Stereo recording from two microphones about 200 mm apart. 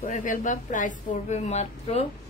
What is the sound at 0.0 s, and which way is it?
Speech, 40° left (ahead or behind).